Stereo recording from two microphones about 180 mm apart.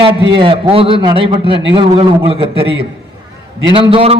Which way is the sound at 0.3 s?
30° right (ahead or behind).